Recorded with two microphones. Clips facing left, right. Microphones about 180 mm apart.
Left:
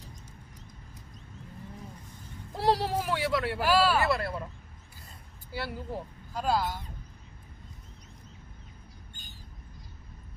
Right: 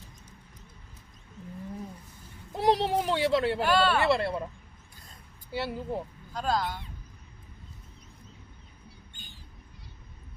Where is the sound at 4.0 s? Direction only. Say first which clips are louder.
Right 3 dB; 25° right (ahead or behind).